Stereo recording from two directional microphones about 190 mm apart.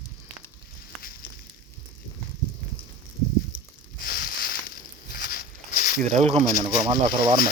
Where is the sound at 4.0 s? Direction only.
50° left (ahead or behind).